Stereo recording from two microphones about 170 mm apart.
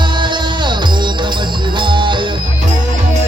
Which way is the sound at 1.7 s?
30° right (ahead or behind).